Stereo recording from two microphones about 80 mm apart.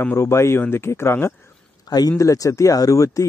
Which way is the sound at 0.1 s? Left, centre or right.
Left.